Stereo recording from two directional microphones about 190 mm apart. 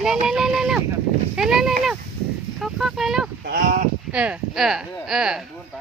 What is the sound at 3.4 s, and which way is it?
Speech, 50° right (ahead or behind).